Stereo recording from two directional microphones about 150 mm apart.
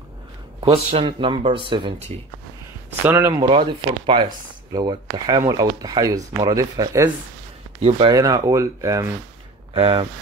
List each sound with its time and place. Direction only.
0.7 s speech: 35° right (ahead or behind)
3.0 s speech: 15° right (ahead or behind)
3.3 s speech: 35° right (ahead or behind)
8.1 s speech: 25° right (ahead or behind)
9.8 s speech: 35° right (ahead or behind)